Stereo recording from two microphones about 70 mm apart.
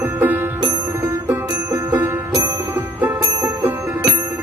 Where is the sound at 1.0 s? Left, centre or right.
Right.